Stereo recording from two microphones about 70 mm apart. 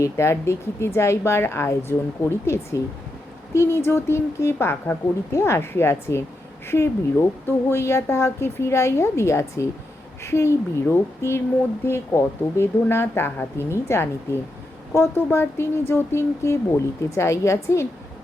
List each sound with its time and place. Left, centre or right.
0.0 s speech: left